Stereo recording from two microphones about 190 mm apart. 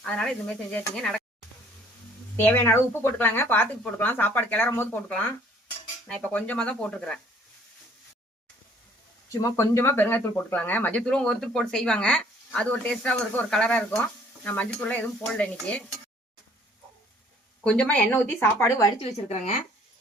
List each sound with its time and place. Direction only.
0.0 s speech: 5° left (ahead or behind)
2.3 s speech: 10° left (ahead or behind)
9.4 s speech: 15° left (ahead or behind)
17.6 s speech: 5° left (ahead or behind)
18.9 s speech: 35° left (ahead or behind)